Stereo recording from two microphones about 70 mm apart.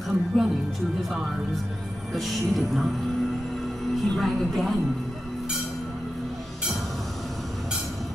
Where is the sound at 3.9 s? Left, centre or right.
Centre.